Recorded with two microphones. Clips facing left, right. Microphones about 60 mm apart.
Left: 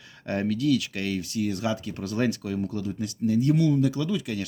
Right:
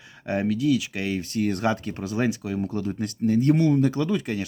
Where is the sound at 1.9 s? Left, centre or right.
Right.